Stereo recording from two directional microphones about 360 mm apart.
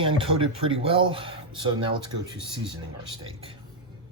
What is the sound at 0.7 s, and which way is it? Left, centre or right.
Speech, centre.